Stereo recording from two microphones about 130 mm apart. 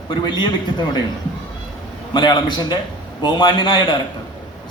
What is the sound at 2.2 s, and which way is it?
A man's voice, 35° left (ahead or behind).